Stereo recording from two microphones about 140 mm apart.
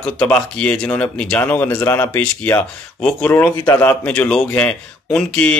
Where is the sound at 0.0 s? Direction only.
10° left (ahead or behind).